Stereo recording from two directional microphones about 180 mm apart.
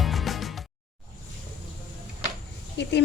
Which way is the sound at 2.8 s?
75° left (ahead or behind).